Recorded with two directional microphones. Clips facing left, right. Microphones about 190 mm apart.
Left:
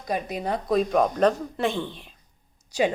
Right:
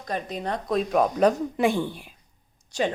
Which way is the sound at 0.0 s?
10° left (ahead or behind).